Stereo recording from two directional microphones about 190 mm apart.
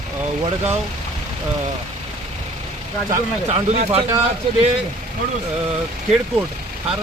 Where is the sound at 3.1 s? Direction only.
35° right (ahead or behind).